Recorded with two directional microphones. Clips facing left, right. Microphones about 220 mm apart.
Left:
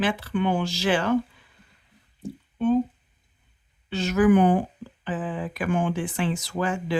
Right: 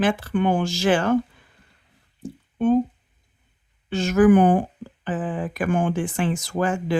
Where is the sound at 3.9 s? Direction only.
50° right (ahead or behind).